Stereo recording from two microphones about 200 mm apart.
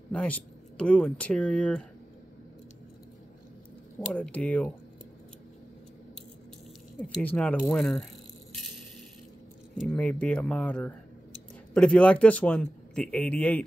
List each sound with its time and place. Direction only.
0.1 s speech: 5° left (ahead or behind)
4.0 s a man's voice: 5° left (ahead or behind)
7.0 s speech: 5° left (ahead or behind)
9.8 s a man's voice: 5° left (ahead or behind)